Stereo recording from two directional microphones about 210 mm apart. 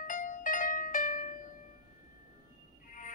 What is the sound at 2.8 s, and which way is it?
Music, 40° left (ahead or behind).